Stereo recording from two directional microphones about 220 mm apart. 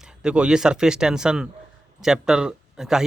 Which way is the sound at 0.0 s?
5° right (ahead or behind).